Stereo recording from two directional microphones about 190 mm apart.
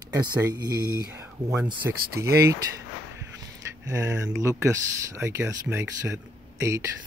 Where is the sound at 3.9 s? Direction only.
15° right (ahead or behind).